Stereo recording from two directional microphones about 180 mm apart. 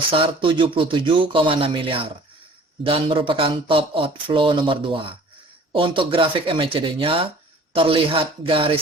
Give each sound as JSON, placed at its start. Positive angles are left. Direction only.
{"t": 0.1, "sound": "speech", "side_deg": -30}